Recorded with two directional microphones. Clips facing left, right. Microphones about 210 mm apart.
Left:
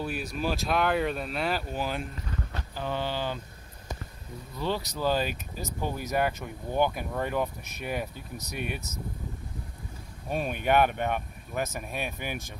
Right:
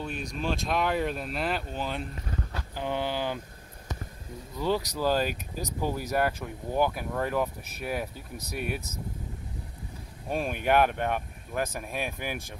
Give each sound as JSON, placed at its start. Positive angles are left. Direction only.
{"t": 0.0, "sound": "speech", "side_deg": 5}
{"t": 2.7, "sound": "speech", "side_deg": -15}
{"t": 4.6, "sound": "speech", "side_deg": -15}
{"t": 10.3, "sound": "speech", "side_deg": -5}